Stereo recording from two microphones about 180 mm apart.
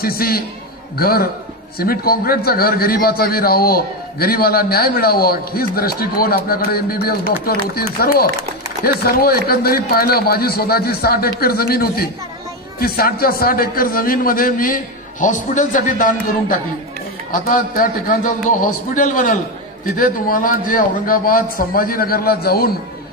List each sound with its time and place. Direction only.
0.0 s a man's voice: 55° left (ahead or behind)